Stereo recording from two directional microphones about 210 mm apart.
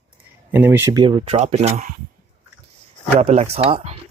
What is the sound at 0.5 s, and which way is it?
Speech, 10° right (ahead or behind).